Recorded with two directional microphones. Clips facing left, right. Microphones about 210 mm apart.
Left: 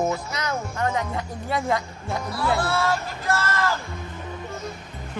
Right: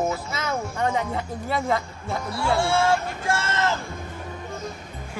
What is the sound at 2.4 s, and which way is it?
Speech, 25° right (ahead or behind).